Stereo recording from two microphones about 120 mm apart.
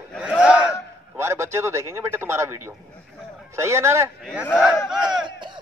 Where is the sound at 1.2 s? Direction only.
20° right (ahead or behind).